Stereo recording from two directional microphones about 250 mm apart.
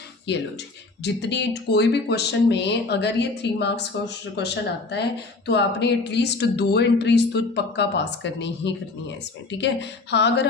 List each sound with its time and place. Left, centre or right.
0.3 s speech: left